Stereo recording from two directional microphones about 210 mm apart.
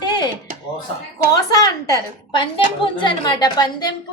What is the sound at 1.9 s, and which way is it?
A woman's voice, 20° left (ahead or behind).